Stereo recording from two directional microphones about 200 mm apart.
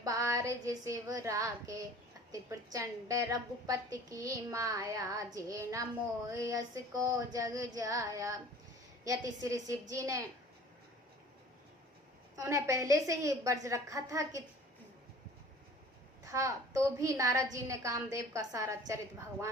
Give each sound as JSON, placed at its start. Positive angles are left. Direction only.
{"t": 0.0, "sound": "child singing", "side_deg": -15}
{"t": 2.3, "sound": "a woman's voice", "side_deg": -15}
{"t": 12.4, "sound": "a woman's voice", "side_deg": -15}
{"t": 16.2, "sound": "a woman's voice", "side_deg": -15}